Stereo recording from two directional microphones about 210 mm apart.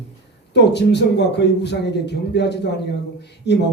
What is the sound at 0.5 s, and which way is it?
A man's voice, 55° left (ahead or behind).